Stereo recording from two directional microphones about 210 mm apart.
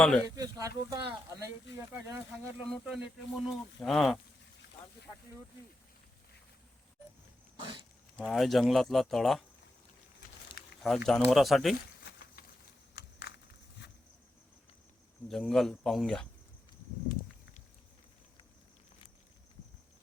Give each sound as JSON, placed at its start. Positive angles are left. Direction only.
{"t": 0.0, "sound": "speech", "side_deg": 5}
{"t": 0.3, "sound": "speech", "side_deg": -15}
{"t": 7.5, "sound": "dog", "side_deg": -20}
{"t": 8.2, "sound": "speech", "side_deg": 0}
{"t": 10.8, "sound": "speech", "side_deg": 0}
{"t": 13.0, "sound": "a sound", "side_deg": 55}
{"t": 15.3, "sound": "speech", "side_deg": 0}